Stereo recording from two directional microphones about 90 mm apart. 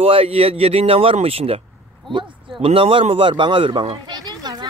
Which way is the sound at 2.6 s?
90° right.